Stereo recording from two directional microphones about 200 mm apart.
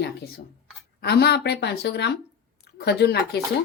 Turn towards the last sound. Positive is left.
turn(degrees=55)  # may be behind; listen again after turning